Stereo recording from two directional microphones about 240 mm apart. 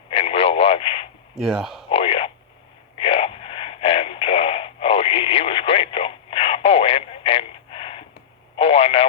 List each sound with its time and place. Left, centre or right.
0.1 s radio: left
1.4 s speech: centre
1.9 s radio: left
8.5 s a sound: left